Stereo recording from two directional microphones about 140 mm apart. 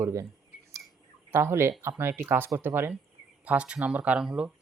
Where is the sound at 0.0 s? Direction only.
25° right (ahead or behind).